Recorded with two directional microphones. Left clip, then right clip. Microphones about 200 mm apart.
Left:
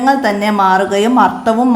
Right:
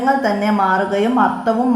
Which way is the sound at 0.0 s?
20° left (ahead or behind).